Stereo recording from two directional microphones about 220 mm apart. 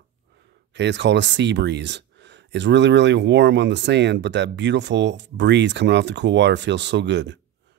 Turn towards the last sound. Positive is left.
turn(degrees=-55)  # may be behind; listen again after turning